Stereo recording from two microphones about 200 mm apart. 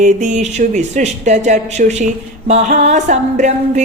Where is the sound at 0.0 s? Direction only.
35° right (ahead or behind).